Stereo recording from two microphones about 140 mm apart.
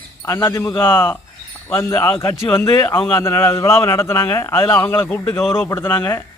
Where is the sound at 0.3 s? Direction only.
20° left (ahead or behind).